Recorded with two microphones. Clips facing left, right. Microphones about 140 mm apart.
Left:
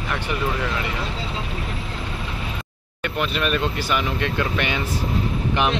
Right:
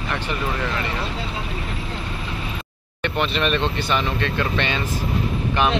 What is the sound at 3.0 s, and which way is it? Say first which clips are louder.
Speech: right 2 dB; 5° left (ahead or behind).